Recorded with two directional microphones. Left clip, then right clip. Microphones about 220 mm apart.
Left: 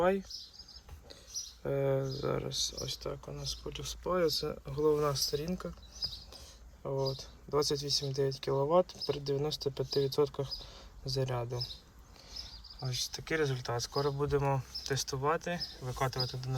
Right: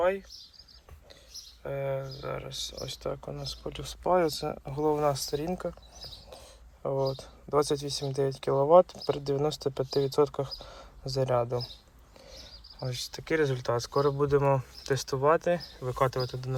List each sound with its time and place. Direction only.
0.0 s speech: 20° left (ahead or behind)
1.6 s speech: 25° left (ahead or behind)
2.7 s speech: 10° left (ahead or behind)
4.4 s speech: 90° right
5.5 s speech: 5° left (ahead or behind)
6.8 s speech: 10° left (ahead or behind)